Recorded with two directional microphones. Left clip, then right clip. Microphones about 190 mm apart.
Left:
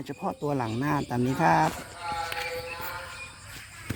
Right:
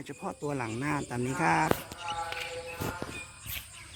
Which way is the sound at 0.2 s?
40° left (ahead or behind).